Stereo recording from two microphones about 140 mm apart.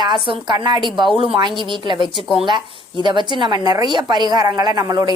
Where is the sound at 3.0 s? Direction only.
35° right (ahead or behind).